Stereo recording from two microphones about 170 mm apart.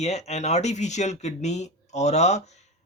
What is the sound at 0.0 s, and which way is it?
Speech, 40° left (ahead or behind).